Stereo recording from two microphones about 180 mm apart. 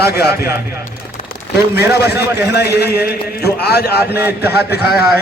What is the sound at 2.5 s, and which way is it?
A man's voice, 65° left (ahead or behind).